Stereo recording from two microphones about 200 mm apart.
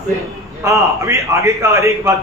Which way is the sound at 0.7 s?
15° right (ahead or behind).